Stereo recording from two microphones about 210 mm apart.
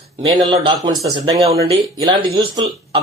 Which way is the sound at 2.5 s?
20° right (ahead or behind).